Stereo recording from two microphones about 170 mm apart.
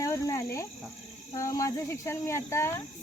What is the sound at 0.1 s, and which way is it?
Cricket, 15° left (ahead or behind).